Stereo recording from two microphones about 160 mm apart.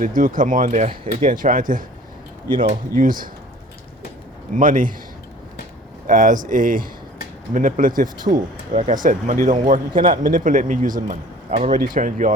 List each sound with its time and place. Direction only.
0.0 s speech: 60° right (ahead or behind)
2.5 s speech: 30° right (ahead or behind)
2.9 s speech: 60° right (ahead or behind)
4.5 s speech: 60° right (ahead or behind)
6.1 s speech: 55° right (ahead or behind)
9.9 s speech: 30° right (ahead or behind)
10.2 s speech: 55° right (ahead or behind)
11.5 s speech: 45° right (ahead or behind)
11.8 s speech: 60° right (ahead or behind)